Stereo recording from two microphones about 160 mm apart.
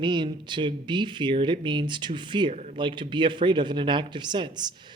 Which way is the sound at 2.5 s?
45° right (ahead or behind).